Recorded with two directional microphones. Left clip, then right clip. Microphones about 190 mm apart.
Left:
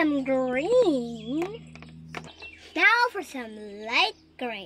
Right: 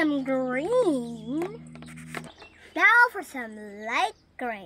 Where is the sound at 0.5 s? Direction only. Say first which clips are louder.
Left 2 dB; 30° right (ahead or behind).